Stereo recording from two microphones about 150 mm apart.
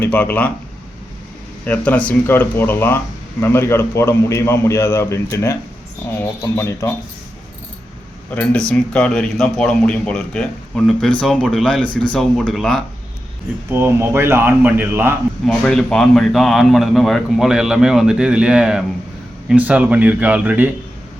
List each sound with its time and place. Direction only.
0.0 s a man's voice: 15° left (ahead or behind)
1.6 s a man's voice: 10° left (ahead or behind)
8.4 s a man's voice: 5° left (ahead or behind)
13.7 s speech: 15° right (ahead or behind)
15.4 s a man's voice: 5° left (ahead or behind)